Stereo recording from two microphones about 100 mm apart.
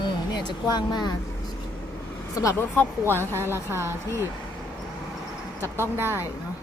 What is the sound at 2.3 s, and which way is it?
Speech, 35° left (ahead or behind).